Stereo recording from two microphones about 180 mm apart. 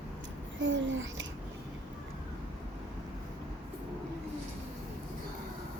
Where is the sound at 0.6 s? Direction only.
90° right.